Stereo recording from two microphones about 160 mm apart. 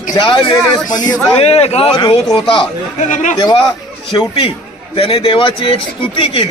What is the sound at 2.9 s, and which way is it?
Speech, 50° left (ahead or behind).